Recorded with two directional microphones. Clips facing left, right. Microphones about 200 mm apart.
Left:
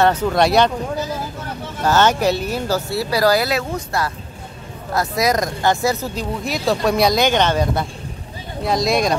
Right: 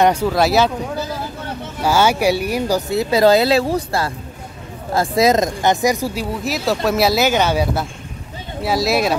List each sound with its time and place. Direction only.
0.0 s speech: 10° right (ahead or behind)
1.8 s speech: 10° right (ahead or behind)